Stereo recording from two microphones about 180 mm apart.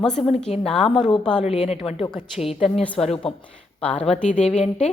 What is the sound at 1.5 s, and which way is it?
A woman's voice, 35° left (ahead or behind).